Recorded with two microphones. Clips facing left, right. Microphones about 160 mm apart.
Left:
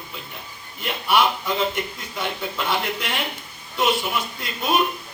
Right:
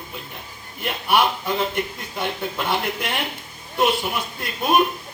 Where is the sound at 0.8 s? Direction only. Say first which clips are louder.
Even; 55° right (ahead or behind).